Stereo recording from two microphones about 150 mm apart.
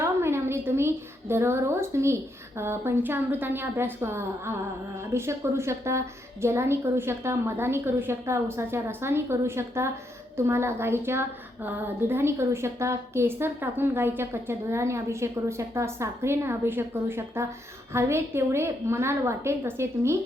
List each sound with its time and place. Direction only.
0.0 s a woman's voice: 15° right (ahead or behind)